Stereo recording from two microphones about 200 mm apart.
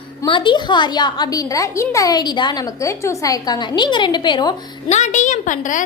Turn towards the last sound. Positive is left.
turn(degrees=40)  # may be behind; listen again after turning